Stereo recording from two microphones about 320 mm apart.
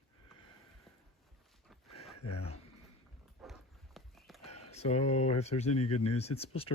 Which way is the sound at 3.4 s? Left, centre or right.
Centre.